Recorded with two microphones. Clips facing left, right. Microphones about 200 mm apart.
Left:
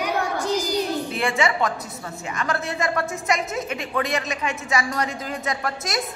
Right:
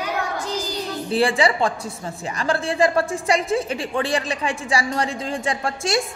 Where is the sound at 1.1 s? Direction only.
30° right (ahead or behind).